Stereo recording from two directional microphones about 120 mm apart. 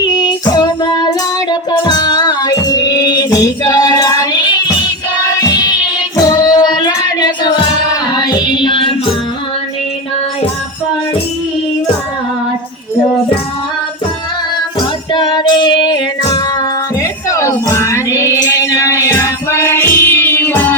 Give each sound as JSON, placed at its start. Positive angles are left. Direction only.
{"t": 0.0, "sound": "child singing", "side_deg": 35}
{"t": 1.5, "sound": "music", "side_deg": 35}
{"t": 15.1, "sound": "child singing", "side_deg": 40}
{"t": 16.3, "sound": "music", "side_deg": 25}